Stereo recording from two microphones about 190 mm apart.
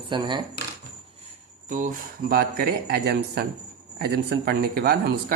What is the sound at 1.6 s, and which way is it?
Speech, 45° right (ahead or behind).